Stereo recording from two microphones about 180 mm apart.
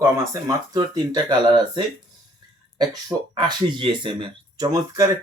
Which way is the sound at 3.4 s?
25° right (ahead or behind).